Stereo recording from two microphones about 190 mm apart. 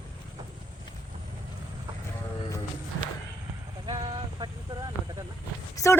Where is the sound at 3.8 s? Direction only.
25° right (ahead or behind).